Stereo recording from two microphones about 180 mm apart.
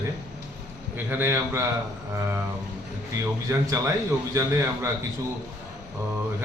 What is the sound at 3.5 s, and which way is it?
A man's voice, 15° right (ahead or behind).